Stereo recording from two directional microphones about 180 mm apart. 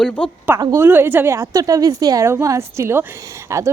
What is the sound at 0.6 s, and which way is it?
A woman's voice, 15° right (ahead or behind).